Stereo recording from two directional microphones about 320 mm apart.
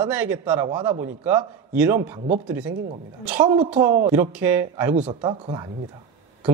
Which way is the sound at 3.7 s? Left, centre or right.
Centre.